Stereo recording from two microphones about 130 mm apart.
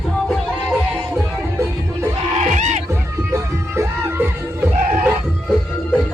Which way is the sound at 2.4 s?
65° right (ahead or behind).